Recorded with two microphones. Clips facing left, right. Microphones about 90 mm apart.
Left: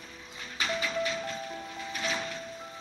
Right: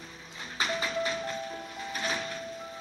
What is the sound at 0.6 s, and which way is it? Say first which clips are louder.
Music: even; 35° right (ahead or behind).